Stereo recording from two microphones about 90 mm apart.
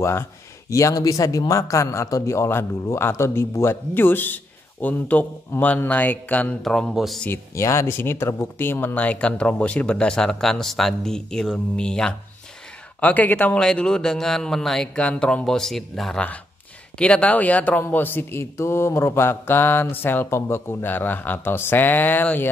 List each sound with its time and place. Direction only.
0.0 s a man's voice: 30° left (ahead or behind)
6.6 s speech: 5° left (ahead or behind)
7.2 s speech: 30° left (ahead or behind); by 17.8 s 15° left (ahead or behind)
17.8 s mantra: 20° left (ahead or behind)